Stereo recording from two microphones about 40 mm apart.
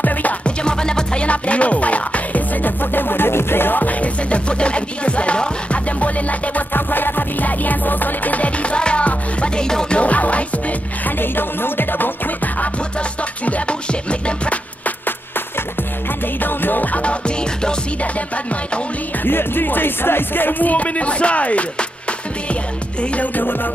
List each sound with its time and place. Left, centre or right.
0.0 s music: left
0.7 s music: left
1.2 s music: left
3.7 s music: left
6.7 s music: left
8.7 s music: left
9.7 s music: centre
9.9 s music: left
11.1 s music: left
13.5 s music: left
16.3 s music: left
19.2 s music: left
23.1 s music: left